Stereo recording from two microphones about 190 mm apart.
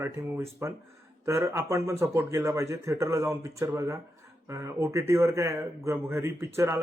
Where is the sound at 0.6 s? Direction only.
15° right (ahead or behind).